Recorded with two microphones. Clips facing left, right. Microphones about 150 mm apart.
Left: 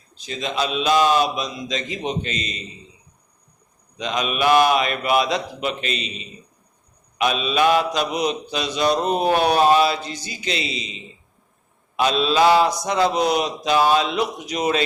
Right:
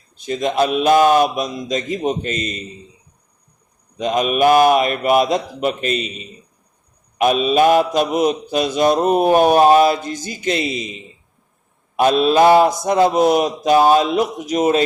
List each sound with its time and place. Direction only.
0.2 s mantra: 50° right (ahead or behind)
3.9 s a man's voice: 45° right (ahead or behind)
4.4 s mantra: 45° right (ahead or behind)